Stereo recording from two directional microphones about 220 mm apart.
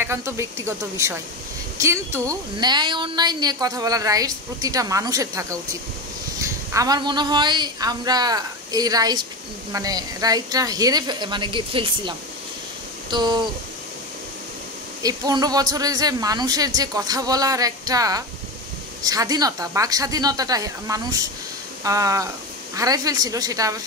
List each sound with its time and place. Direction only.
0.0 s a woman's voice: 10° right (ahead or behind)
15.0 s a woman's voice: 15° right (ahead or behind)